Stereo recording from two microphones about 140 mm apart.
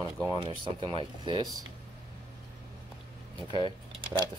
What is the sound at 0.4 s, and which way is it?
Speech, 35° right (ahead or behind).